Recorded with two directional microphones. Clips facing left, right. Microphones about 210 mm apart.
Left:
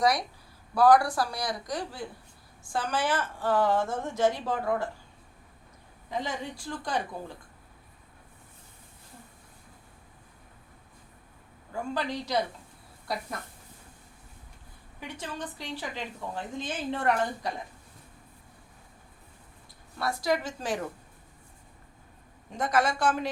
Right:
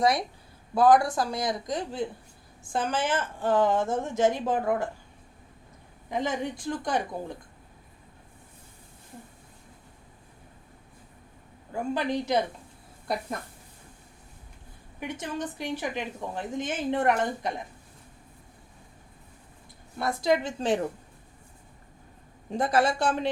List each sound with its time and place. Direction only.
0.0 s a woman's voice: 25° right (ahead or behind)
6.1 s a woman's voice: 20° right (ahead or behind)
11.7 s a woman's voice: 20° right (ahead or behind)
15.0 s a woman's voice: 20° right (ahead or behind)
20.0 s a woman's voice: 20° right (ahead or behind)
22.5 s speech: 30° right (ahead or behind)